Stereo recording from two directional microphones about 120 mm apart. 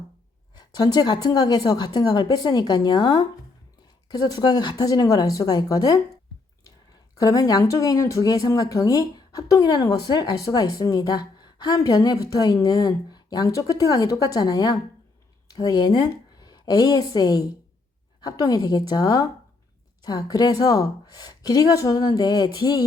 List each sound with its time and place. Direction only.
0.5 s a woman's voice: 35° left (ahead or behind)
7.2 s a woman's voice: 30° left (ahead or behind)